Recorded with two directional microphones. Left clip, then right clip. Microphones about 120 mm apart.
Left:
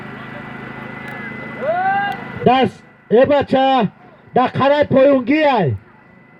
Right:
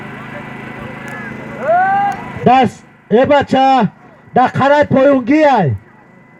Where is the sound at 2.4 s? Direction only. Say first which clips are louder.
Right 4 dB; 90° left.